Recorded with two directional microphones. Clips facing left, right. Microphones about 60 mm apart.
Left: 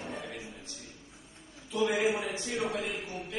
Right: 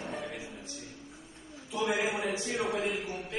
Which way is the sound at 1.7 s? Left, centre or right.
Centre.